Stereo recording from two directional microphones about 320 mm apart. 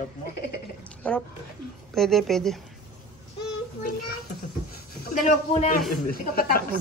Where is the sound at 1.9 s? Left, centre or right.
Centre.